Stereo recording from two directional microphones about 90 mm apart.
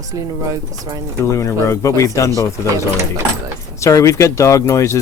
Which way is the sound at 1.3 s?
35° left (ahead or behind).